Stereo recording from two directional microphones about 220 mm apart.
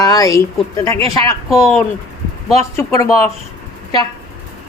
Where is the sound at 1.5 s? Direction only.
Centre (ahead or behind).